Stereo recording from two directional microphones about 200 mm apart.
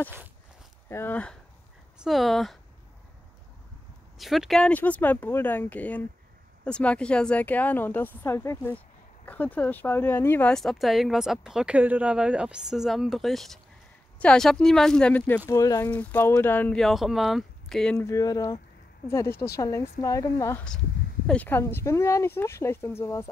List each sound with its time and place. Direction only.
0.8 s a woman's voice: 10° left (ahead or behind)
4.2 s a woman's voice: centre (ahead or behind)
17.9 s speech: 15° left (ahead or behind)